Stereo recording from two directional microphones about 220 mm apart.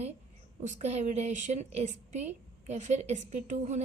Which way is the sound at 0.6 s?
30° right (ahead or behind).